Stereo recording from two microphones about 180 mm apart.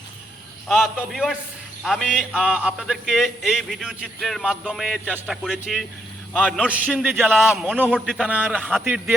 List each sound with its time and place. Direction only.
0.7 s a man's voice: centre (ahead or behind)
6.7 s a man's voice: 5° right (ahead or behind)
8.3 s a man's voice: 10° right (ahead or behind)